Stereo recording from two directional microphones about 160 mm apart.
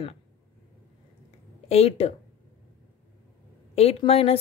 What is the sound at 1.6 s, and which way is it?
Speech, 40° left (ahead or behind).